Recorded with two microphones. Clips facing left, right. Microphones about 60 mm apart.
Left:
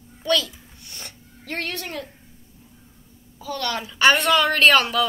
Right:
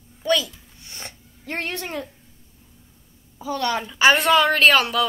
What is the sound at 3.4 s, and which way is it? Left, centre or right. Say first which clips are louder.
Speech: right 3 dB; centre.